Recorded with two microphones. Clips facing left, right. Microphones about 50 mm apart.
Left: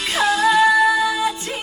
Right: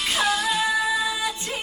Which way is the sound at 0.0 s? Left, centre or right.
Left.